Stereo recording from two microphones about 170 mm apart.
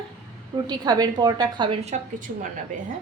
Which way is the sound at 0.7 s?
25° right (ahead or behind).